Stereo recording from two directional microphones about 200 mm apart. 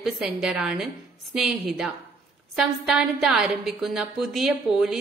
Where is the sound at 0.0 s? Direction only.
Centre (ahead or behind).